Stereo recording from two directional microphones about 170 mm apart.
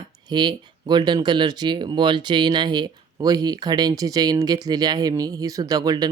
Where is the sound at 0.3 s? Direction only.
25° right (ahead or behind).